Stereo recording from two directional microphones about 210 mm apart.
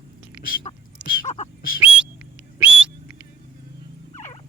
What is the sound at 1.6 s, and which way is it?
Bird, 40° left (ahead or behind).